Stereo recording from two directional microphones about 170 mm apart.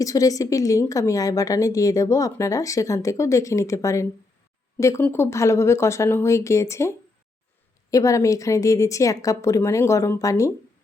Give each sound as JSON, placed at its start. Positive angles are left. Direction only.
{"t": 0.0, "sound": "a woman's voice", "side_deg": 20}